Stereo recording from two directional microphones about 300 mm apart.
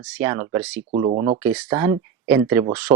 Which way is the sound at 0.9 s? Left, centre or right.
Right.